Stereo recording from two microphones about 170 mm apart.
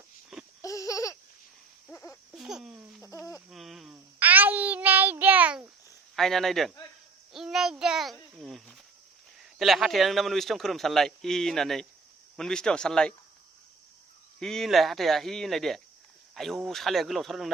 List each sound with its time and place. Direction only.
0.6 s a sound: 20° left (ahead or behind)
2.3 s speech: 5° right (ahead or behind)
3.5 s child singing: centre (ahead or behind)
6.1 s a man's voice: centre (ahead or behind)
14.3 s a man's voice: 5° left (ahead or behind)